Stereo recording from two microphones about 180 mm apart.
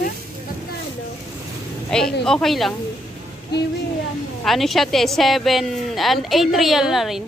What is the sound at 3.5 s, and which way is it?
Speech, 65° left (ahead or behind).